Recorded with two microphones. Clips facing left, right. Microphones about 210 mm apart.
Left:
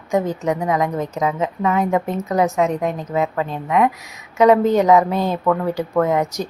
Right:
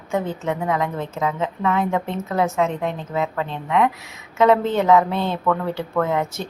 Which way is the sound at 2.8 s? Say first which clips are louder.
Left 3 dB; 45° left (ahead or behind).